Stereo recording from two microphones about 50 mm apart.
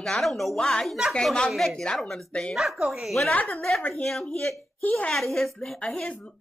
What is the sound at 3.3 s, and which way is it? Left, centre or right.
Speech, left.